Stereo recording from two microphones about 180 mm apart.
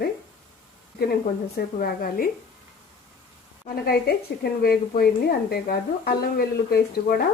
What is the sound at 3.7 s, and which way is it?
Speech, 50° left (ahead or behind).